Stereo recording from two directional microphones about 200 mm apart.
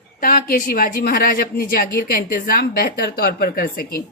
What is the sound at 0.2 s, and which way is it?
A woman's voice, 45° left (ahead or behind).